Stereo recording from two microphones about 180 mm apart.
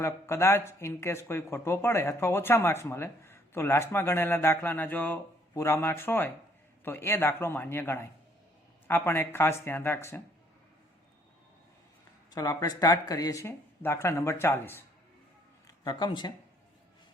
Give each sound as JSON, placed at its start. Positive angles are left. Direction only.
{"t": 0.0, "sound": "speech", "side_deg": 15}
{"t": 12.3, "sound": "speech", "side_deg": 20}
{"t": 15.6, "sound": "speech", "side_deg": 25}